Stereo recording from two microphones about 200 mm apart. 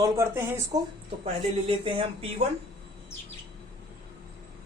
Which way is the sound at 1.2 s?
25° right (ahead or behind).